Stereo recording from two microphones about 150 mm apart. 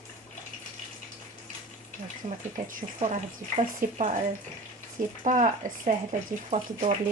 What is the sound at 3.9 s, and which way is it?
Speech, 45° right (ahead or behind).